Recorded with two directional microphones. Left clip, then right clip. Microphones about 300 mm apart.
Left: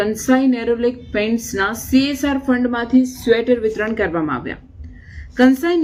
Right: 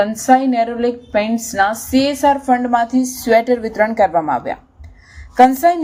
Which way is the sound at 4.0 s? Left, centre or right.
Right.